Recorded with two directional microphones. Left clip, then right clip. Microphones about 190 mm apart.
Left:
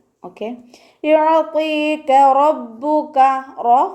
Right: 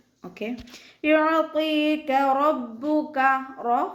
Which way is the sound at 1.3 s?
15° left (ahead or behind).